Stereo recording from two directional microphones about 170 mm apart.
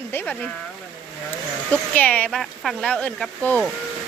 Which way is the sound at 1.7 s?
10° left (ahead or behind).